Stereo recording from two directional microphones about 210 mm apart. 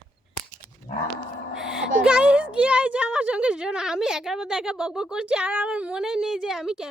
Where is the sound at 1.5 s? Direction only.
5° right (ahead or behind).